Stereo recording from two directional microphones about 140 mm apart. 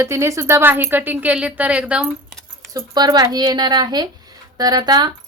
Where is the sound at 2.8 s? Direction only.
30° right (ahead or behind).